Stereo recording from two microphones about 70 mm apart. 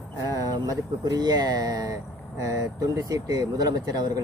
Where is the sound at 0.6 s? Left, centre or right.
Right.